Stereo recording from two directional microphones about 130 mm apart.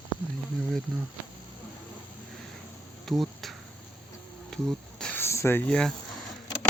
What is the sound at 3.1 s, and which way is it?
Speech, centre (ahead or behind).